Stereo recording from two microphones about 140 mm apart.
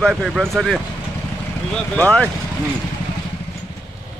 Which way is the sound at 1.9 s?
10° left (ahead or behind).